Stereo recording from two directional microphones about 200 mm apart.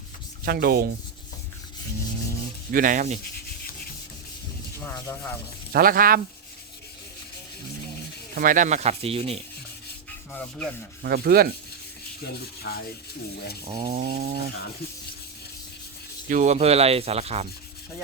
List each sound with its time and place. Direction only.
0.4 s rub: 50° right (ahead or behind)
2.7 s rub: 40° right (ahead or behind)
4.8 s speech: 15° left (ahead or behind)
5.7 s rub: 45° right (ahead or behind)
8.4 s rub: 40° right (ahead or behind)
10.3 s rub: 5° left (ahead or behind)
11.0 s rub: 50° right (ahead or behind)
12.2 s rub: 55° left (ahead or behind)
13.7 s stir: 25° right (ahead or behind)
14.0 s rub: 50° right (ahead or behind)
16.3 s rub: 35° right (ahead or behind)